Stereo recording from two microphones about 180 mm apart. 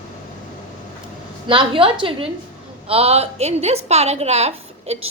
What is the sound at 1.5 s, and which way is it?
A woman's voice, 30° right (ahead or behind).